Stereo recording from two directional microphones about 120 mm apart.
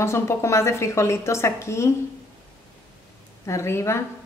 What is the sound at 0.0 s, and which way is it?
A woman's voice, 20° left (ahead or behind).